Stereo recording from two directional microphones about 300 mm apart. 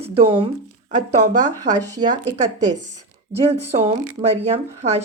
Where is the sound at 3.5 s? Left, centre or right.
Right.